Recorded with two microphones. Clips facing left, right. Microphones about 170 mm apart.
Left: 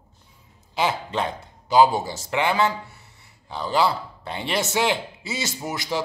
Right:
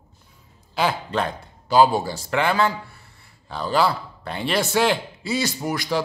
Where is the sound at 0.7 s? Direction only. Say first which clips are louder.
Right 1 dB; 20° left (ahead or behind).